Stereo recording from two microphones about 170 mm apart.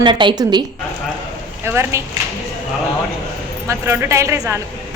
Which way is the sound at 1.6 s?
15° right (ahead or behind).